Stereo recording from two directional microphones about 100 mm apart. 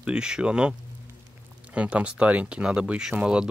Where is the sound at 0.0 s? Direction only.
10° right (ahead or behind).